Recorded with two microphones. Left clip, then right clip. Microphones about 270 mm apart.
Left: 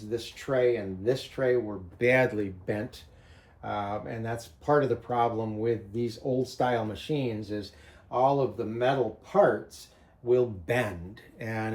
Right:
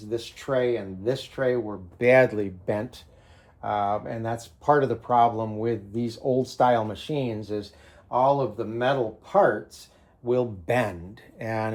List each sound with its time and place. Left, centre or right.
0.1 s speech: centre